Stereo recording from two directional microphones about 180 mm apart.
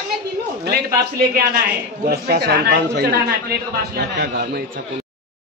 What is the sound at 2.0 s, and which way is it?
Speech, 65° right (ahead or behind).